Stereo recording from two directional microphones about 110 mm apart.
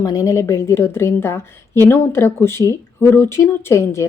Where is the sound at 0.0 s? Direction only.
35° left (ahead or behind).